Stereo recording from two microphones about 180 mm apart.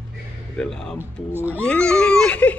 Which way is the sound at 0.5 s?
5° left (ahead or behind).